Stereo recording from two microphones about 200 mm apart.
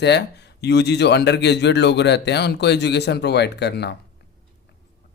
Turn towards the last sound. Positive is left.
turn(degrees=55)  # may be behind; listen again after turning